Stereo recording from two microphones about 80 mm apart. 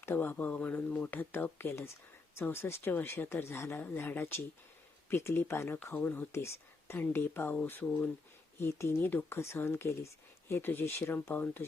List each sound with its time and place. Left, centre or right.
0.0 s speech: left
8.5 s speech: left